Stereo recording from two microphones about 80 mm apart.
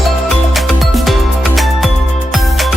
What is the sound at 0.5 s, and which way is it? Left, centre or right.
Music, centre.